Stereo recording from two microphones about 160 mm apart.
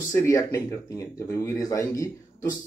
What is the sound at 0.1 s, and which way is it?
Speech, 20° left (ahead or behind).